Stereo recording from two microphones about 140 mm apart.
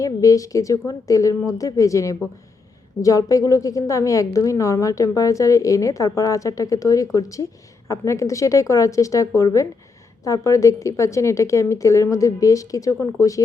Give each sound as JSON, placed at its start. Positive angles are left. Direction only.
{"t": 0.0, "sound": "a woman's voice", "side_deg": 25}